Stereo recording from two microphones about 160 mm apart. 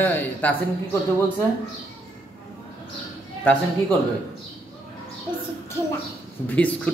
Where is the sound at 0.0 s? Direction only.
10° left (ahead or behind).